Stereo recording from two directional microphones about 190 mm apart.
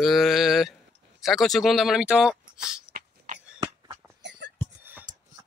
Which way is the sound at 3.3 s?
45° right (ahead or behind).